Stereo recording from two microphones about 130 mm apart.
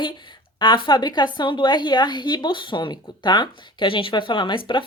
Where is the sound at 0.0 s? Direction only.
35° left (ahead or behind).